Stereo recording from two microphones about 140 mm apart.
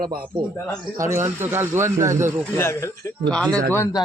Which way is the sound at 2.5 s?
20° left (ahead or behind).